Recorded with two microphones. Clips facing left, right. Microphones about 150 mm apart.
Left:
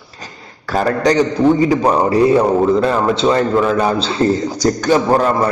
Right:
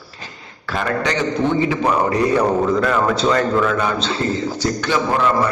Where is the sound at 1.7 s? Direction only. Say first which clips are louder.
Left 4 dB; 30° left (ahead or behind).